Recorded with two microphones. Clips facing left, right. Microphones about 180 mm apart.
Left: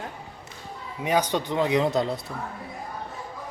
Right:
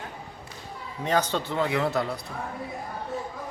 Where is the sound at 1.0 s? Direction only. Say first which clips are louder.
Left 1 dB; 10° left (ahead or behind).